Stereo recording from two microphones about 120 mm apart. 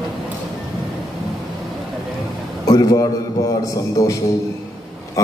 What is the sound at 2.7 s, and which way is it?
A woman's voice, 30° left (ahead or behind).